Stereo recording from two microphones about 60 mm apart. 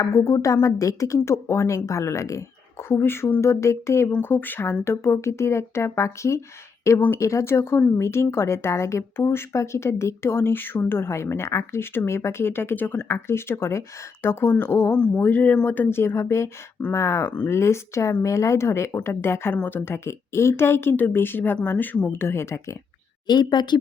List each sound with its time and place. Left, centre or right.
0.0 s a woman's voice: left
2.9 s speech: left
3.4 s a woman's voice: left
4.2 s a woman's voice: left
13.1 s a woman's voice: left
14.9 s a woman's voice: left